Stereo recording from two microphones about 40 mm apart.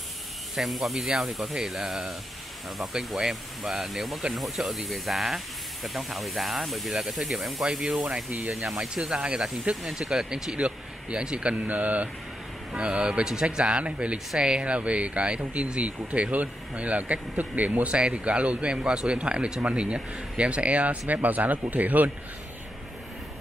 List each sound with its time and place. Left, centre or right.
0.6 s speech: centre
3.2 s speech: centre
7.7 s speech: centre
8.3 s speech: right
8.8 s a man's voice: right
10.6 s speech: right
11.5 s speech: right
12.7 s a man's voice: right
13.2 s a man's voice: centre; by 17.9 s right
17.9 s a man's voice: right